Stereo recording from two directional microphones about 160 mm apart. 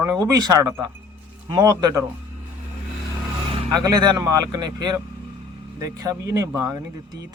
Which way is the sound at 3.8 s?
25° right (ahead or behind).